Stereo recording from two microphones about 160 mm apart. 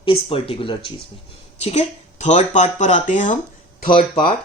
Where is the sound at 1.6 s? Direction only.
45° left (ahead or behind).